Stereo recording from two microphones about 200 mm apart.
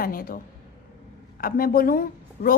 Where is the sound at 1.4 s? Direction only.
45° left (ahead or behind).